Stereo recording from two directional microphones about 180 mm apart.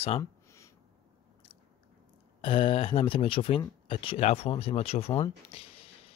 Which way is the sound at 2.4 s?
30° left (ahead or behind).